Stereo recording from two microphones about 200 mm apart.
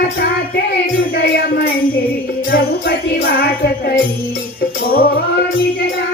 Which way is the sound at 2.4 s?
50° left (ahead or behind).